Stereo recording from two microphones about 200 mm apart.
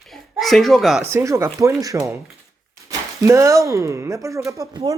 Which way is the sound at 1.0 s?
15° right (ahead or behind).